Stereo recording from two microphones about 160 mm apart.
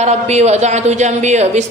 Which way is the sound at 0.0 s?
45° right (ahead or behind).